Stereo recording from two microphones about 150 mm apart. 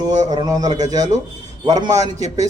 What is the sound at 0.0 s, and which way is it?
A man's voice, 25° right (ahead or behind).